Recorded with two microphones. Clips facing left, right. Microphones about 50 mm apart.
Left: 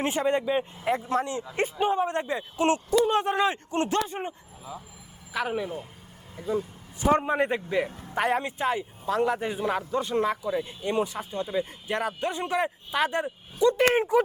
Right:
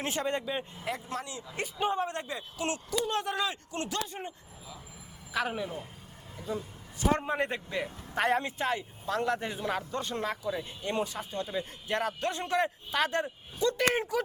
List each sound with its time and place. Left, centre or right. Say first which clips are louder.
0.0 s speech: left 7 dB; left
0.9 s speech: left 11 dB; left
1.8 s speech: left 4 dB; centre
2.0 s speech: left 8 dB; left
5.3 s speech: left 3 dB; centre
7.0 s speech: left 6 dB; centre